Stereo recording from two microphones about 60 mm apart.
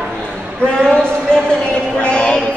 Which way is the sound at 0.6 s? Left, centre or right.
Centre.